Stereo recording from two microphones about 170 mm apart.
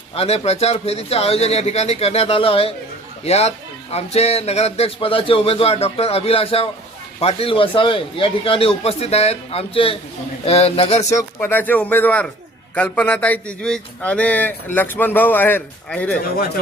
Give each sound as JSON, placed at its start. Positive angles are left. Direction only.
{"t": 0.1, "sound": "a man's voice", "side_deg": 35}
{"t": 11.1, "sound": "speech", "side_deg": 15}